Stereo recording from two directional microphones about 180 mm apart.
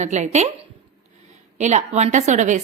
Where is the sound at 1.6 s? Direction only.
40° right (ahead or behind).